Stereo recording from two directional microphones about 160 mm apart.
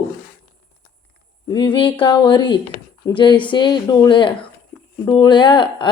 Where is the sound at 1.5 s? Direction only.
30° left (ahead or behind).